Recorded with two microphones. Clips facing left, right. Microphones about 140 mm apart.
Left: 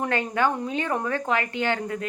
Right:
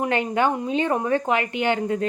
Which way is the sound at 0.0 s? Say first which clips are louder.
Right 3 dB; 20° right (ahead or behind).